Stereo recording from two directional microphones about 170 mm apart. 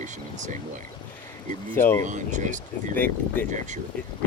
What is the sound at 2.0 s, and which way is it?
Speech, 45° right (ahead or behind).